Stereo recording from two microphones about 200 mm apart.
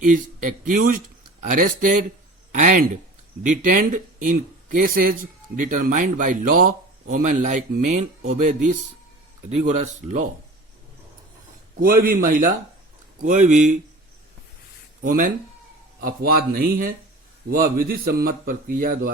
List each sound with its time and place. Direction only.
0.0 s speech: 40° right (ahead or behind)
11.8 s speech: 45° right (ahead or behind)
15.0 s speech: 45° right (ahead or behind)